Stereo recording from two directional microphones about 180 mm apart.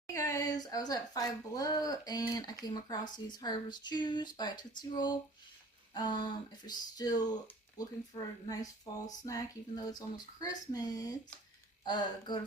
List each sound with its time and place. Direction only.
0.1 s speech: 15° left (ahead or behind)